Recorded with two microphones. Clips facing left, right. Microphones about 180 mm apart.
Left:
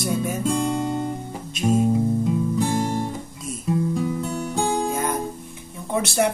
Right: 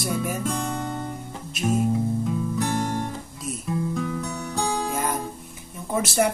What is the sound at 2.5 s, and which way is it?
Music, 15° left (ahead or behind).